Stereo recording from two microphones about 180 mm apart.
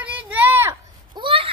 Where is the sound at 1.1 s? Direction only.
30° right (ahead or behind).